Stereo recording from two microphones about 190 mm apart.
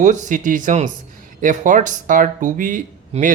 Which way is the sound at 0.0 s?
40° right (ahead or behind).